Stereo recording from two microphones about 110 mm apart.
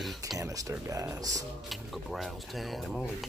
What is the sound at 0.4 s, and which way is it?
Speech, 30° right (ahead or behind).